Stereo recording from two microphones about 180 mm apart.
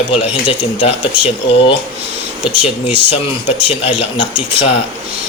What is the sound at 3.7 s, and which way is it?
Speech, 30° left (ahead or behind).